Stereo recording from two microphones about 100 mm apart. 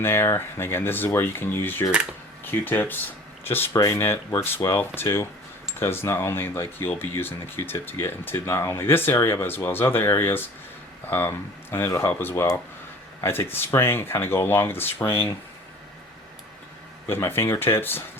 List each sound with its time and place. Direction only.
0.0 s speech: 25° left (ahead or behind)
17.1 s speech: 25° left (ahead or behind)